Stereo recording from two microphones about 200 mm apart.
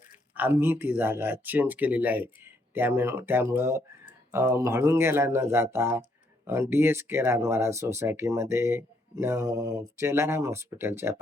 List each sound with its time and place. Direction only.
0.3 s speech: 10° right (ahead or behind)